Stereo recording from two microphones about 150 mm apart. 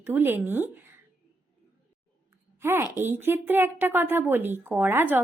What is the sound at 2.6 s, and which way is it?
A woman's voice, 15° right (ahead or behind).